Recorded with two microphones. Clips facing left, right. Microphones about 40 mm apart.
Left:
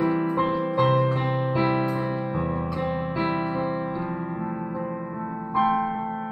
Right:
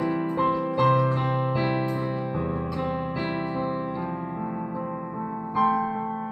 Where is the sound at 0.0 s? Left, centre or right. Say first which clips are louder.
Left 1 dB; centre.